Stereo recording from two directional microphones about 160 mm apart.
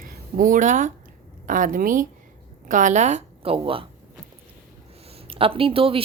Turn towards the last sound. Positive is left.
turn(degrees=-35)  # may be behind; listen again after turning